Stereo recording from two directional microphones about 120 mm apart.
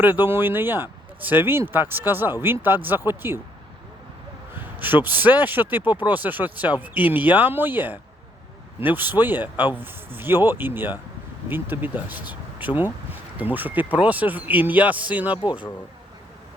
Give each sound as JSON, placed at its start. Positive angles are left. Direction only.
{"t": 0.0, "sound": "speech", "side_deg": -15}
{"t": 4.5, "sound": "a man's voice", "side_deg": -15}